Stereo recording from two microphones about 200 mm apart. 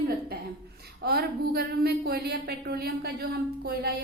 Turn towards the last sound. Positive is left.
turn(degrees=-50)  # may be behind; listen again after turning